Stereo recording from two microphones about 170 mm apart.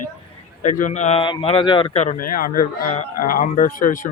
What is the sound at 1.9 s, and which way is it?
Speech, 50° left (ahead or behind).